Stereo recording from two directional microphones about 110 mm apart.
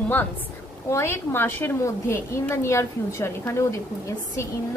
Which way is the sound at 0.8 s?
25° left (ahead or behind).